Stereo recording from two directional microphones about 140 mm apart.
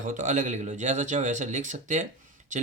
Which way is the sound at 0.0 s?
60° right (ahead or behind).